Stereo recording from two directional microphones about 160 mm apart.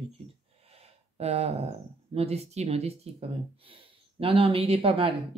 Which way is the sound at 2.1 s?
40° right (ahead or behind).